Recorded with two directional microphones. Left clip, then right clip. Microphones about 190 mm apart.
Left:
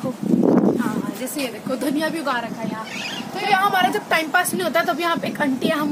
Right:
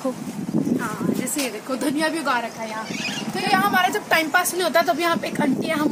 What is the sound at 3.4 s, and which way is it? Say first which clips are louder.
A woman's voice: left 2 dB; 5° right (ahead or behind).